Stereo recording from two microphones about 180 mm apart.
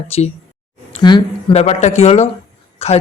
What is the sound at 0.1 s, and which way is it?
Speech, 35° left (ahead or behind).